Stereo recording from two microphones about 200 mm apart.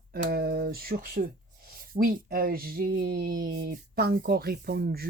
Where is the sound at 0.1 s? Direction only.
50° right (ahead or behind).